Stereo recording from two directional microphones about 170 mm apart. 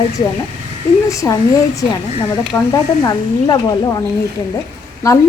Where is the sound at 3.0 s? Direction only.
25° left (ahead or behind).